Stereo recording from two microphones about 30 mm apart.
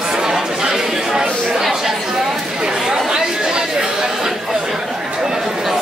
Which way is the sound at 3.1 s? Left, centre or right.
Right.